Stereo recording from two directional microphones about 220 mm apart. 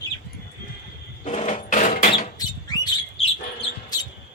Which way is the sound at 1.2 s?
30° left (ahead or behind).